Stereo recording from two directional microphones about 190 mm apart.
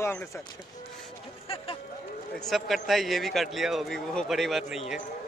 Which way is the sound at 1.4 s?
30° left (ahead or behind).